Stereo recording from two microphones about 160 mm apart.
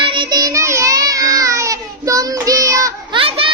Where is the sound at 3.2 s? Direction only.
35° right (ahead or behind).